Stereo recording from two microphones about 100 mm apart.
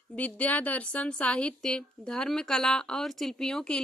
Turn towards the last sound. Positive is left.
turn(degrees=5)  # may be behind; listen again after turning